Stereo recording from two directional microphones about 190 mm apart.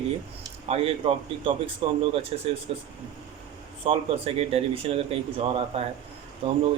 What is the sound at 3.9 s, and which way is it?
A man's voice, 30° right (ahead or behind).